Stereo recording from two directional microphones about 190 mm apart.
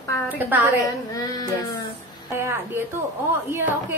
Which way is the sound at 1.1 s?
20° left (ahead or behind).